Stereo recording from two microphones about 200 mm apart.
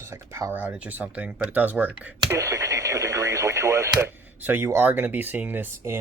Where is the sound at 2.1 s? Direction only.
20° right (ahead or behind).